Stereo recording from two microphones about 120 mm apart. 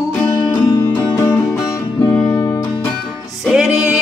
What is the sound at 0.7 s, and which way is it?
Music, 25° left (ahead or behind).